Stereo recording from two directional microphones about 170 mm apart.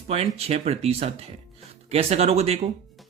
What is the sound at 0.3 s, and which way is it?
Speech, 35° right (ahead or behind).